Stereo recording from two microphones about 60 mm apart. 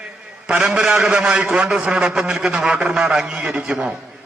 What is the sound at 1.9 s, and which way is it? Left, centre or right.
A man's voice, centre.